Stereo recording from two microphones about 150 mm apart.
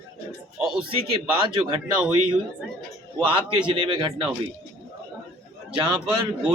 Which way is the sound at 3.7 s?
35° right (ahead or behind).